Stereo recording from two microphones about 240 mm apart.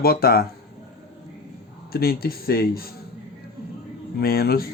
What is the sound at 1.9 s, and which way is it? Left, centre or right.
Speech, left.